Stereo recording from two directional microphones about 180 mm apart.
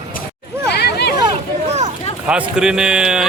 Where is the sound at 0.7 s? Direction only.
65° left (ahead or behind).